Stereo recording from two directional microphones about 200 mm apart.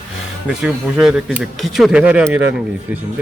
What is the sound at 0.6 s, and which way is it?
Speech, 5° right (ahead or behind).